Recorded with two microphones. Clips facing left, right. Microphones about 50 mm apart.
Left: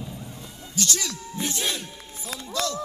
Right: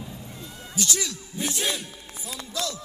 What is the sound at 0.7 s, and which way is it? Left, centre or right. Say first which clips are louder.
Music: even; centre.